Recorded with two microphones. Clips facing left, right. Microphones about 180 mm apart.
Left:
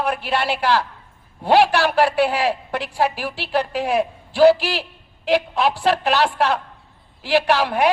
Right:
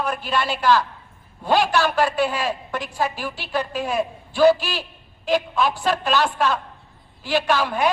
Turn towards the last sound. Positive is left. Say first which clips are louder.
# left 3 dB
turn(degrees=70)  # may be behind; listen again after turning